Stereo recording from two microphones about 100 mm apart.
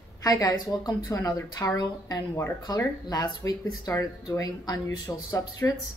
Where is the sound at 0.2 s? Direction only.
35° left (ahead or behind).